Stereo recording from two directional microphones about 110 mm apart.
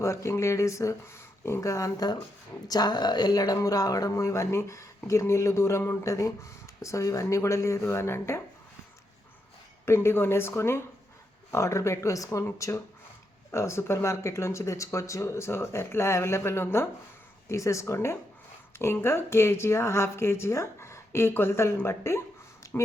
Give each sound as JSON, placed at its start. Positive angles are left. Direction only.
{"t": 0.0, "sound": "speech", "side_deg": 25}
{"t": 9.8, "sound": "speech", "side_deg": 20}
{"t": 22.6, "sound": "a sound", "side_deg": 30}